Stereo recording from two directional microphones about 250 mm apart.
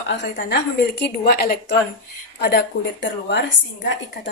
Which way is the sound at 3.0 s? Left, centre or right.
Left.